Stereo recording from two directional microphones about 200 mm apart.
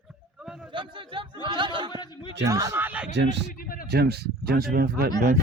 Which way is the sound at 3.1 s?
60° right (ahead or behind).